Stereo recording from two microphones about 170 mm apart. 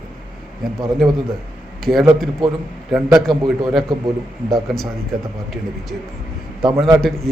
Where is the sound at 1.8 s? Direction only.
Centre (ahead or behind).